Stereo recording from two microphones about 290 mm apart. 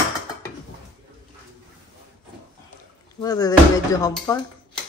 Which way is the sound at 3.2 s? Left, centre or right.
Centre.